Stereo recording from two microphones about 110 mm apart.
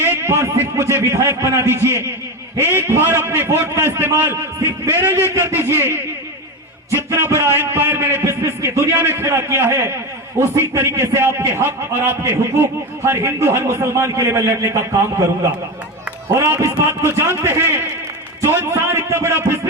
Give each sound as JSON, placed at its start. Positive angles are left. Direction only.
{"t": 0.2, "sound": "a man's voice", "side_deg": -25}
{"t": 7.1, "sound": "a man's voice", "side_deg": -25}
{"t": 16.5, "sound": "a man's voice", "side_deg": -25}